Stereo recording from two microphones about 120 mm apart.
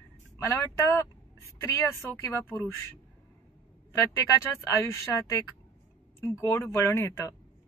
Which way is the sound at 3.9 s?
25° left (ahead or behind).